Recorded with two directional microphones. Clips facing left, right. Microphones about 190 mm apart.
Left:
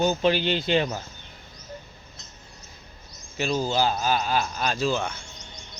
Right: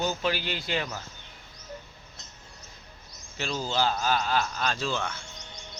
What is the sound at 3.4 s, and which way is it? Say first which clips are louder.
A man's voice: left 5 dB; 15° left (ahead or behind).